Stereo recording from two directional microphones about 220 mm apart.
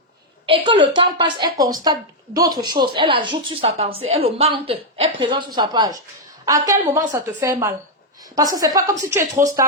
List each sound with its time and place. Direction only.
0.4 s a woman's voice: 25° right (ahead or behind)